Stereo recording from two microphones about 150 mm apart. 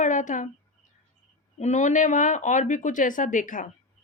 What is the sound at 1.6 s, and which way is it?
A woman's voice, 50° left (ahead or behind).